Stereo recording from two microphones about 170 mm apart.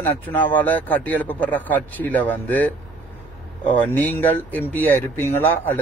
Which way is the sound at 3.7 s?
10° left (ahead or behind).